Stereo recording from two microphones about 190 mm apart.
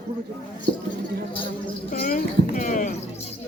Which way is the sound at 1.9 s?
45° left (ahead or behind).